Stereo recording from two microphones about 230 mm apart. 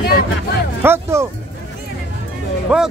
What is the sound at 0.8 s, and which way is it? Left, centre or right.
Speech, centre.